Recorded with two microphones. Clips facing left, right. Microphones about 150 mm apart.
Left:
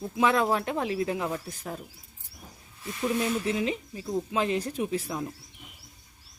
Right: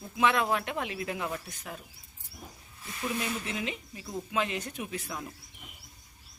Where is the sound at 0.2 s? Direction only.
30° left (ahead or behind).